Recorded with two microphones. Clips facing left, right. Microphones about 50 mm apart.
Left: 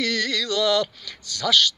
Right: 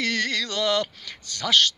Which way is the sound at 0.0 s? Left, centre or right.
Right.